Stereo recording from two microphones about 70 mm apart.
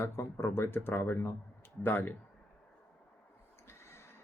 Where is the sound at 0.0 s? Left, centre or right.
Left.